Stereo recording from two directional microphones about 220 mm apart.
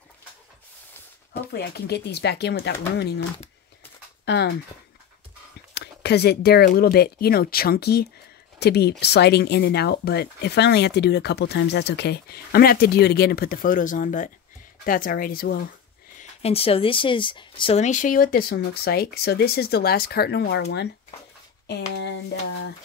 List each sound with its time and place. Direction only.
1.5 s speech: 45° left (ahead or behind)
5.8 s speech: 50° left (ahead or behind)
16.2 s speech: 25° left (ahead or behind); by 20.6 s 50° left (ahead or behind)
21.6 s speech: 50° left (ahead or behind)